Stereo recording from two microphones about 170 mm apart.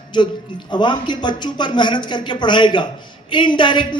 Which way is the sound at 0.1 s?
25° left (ahead or behind).